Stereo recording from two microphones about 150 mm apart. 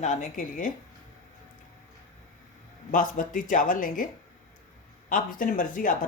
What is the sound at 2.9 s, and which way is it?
Speech, 65° left (ahead or behind).